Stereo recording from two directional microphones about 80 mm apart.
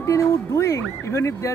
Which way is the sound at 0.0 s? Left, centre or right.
Left.